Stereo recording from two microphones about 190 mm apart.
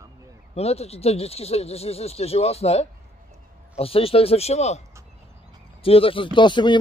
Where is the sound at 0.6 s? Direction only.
35° left (ahead or behind).